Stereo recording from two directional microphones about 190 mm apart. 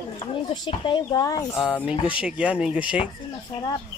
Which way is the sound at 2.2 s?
5° right (ahead or behind).